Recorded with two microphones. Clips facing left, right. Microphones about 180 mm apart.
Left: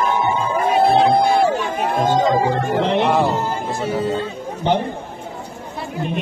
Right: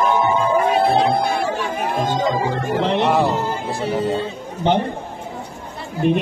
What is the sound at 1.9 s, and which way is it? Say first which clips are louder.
Speech: left 5 dB; 55° left (ahead or behind).